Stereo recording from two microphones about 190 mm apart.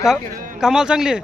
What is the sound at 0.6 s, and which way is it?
Speech, 5° right (ahead or behind).